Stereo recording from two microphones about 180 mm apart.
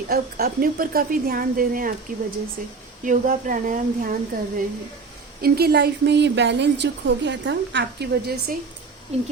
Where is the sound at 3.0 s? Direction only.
45° right (ahead or behind).